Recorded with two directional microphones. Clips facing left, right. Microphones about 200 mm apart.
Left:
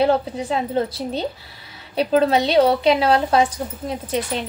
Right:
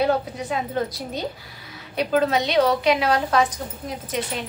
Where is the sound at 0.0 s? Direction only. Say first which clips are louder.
Left 3 dB; 30° left (ahead or behind).